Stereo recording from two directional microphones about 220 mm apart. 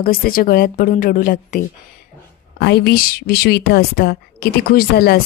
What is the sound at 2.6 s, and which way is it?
A woman's voice, 45° left (ahead or behind).